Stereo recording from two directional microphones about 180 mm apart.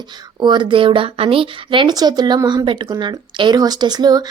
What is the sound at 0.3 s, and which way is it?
A woman's voice, 25° right (ahead or behind).